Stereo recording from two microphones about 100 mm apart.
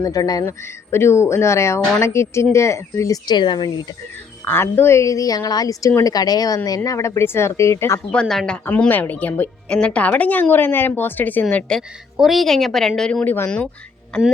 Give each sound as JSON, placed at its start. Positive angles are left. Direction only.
{"t": 0.0, "sound": "a woman's voice", "side_deg": 40}
{"t": 0.6, "sound": "speech", "side_deg": 25}
{"t": 3.2, "sound": "speech", "side_deg": 45}
{"t": 4.4, "sound": "a woman's voice", "side_deg": 25}
{"t": 8.1, "sound": "a woman's voice", "side_deg": 5}
{"t": 8.8, "sound": "a woman's voice", "side_deg": 15}
{"t": 12.1, "sound": "a woman's voice", "side_deg": 0}
{"t": 13.2, "sound": "speech", "side_deg": 20}
{"t": 14.1, "sound": "a woman's voice", "side_deg": 10}